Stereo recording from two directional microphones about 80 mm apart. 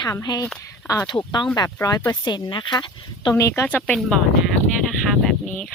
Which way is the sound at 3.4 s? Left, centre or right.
Left.